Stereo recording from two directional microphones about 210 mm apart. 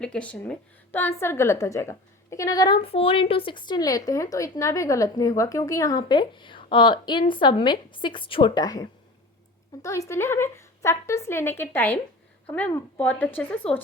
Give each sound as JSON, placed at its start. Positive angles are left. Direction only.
{"t": 0.0, "sound": "a woman's voice", "side_deg": 5}